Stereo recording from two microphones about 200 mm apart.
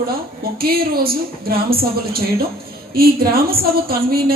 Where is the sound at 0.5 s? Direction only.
50° right (ahead or behind).